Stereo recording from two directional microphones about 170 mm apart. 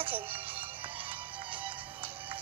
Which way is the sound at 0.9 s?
30° right (ahead or behind).